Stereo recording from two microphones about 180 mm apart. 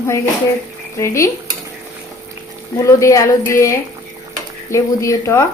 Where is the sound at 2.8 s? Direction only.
15° left (ahead or behind).